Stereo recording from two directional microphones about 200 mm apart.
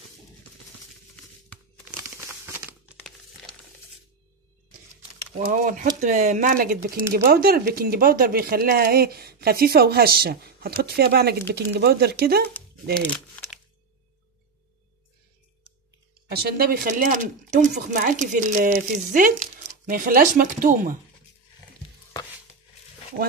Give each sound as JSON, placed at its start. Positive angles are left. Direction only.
{"t": 1.9, "sound": "crumpling", "side_deg": -10}
{"t": 5.5, "sound": "speech", "side_deg": -40}
{"t": 13.0, "sound": "crumpling", "side_deg": 5}
{"t": 16.3, "sound": "speech", "side_deg": -50}